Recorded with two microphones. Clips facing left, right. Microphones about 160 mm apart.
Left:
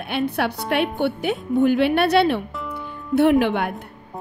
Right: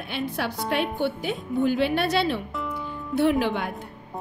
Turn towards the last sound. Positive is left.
turn(degrees=65)  # may be behind; listen again after turning